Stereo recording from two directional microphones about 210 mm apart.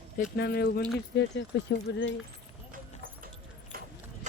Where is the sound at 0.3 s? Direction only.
50° left (ahead or behind).